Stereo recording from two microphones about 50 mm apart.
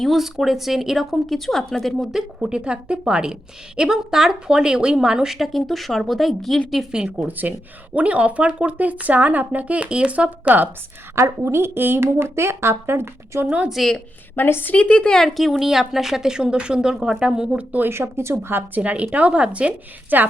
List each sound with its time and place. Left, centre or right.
0.0 s speech: centre
2.5 s speech: centre
6.9 s speech: centre
7.3 s speech: right
11.1 s a woman's voice: right
13.8 s speech: centre
14.3 s a woman's voice: left
14.7 s a woman's voice: left
15.1 s speech: centre
16.9 s speech: centre
17.8 s a woman's voice: right
18.8 s speech: right
20.1 s speech: right